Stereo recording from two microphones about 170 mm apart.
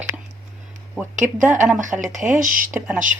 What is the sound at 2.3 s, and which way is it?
Speech, 55° right (ahead or behind).